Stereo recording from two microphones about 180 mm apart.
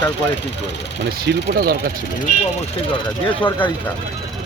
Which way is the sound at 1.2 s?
60° right (ahead or behind).